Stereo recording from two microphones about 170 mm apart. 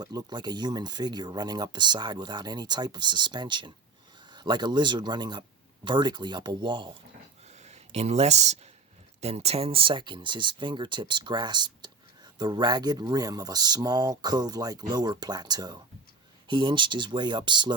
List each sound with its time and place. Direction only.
0.0 s speech: 25° right (ahead or behind)
7.4 s a sound: 40° right (ahead or behind)
9.2 s speech: 40° right (ahead or behind)